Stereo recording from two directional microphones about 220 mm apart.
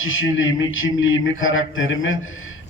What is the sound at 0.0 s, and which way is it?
A man's voice, 65° left (ahead or behind).